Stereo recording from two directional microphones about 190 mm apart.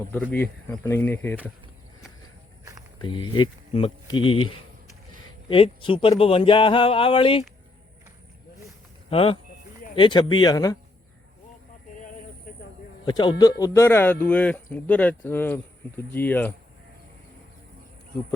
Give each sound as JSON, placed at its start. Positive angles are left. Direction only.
{"t": 0.1, "sound": "speech", "side_deg": 10}
{"t": 3.0, "sound": "speech", "side_deg": 25}
{"t": 9.0, "sound": "speech", "side_deg": 30}
{"t": 13.1, "sound": "speech", "side_deg": 25}